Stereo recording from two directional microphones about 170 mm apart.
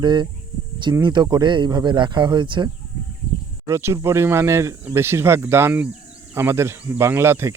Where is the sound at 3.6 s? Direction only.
15° right (ahead or behind).